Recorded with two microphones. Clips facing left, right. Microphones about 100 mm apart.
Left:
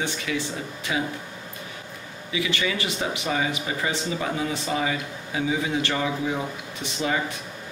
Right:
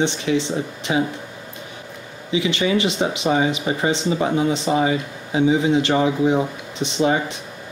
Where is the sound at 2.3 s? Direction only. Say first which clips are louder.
Right 7 dB; 25° right (ahead or behind).